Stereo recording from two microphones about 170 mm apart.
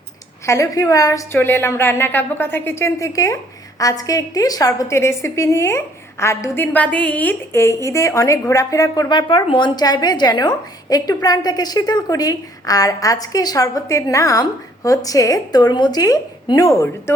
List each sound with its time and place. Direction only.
0.4 s a woman's voice: 15° left (ahead or behind)